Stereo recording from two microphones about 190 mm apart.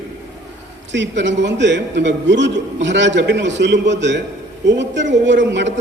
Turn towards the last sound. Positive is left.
turn(degrees=-70)  # may be behind; listen again after turning